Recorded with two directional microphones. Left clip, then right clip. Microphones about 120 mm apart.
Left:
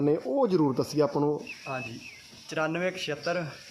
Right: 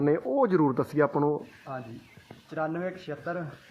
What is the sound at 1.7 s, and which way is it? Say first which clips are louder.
Speech: left 3 dB; 40° left (ahead or behind).